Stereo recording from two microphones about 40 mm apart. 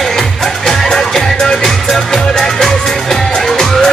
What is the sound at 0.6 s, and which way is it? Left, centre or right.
Music, centre.